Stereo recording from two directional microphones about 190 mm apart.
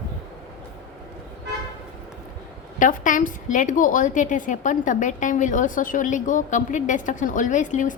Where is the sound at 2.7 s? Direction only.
45° left (ahead or behind).